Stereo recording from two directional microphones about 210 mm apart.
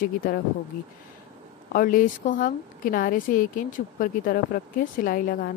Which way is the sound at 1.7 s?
40° left (ahead or behind).